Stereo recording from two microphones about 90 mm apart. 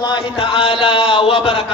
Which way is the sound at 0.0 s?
60° left (ahead or behind).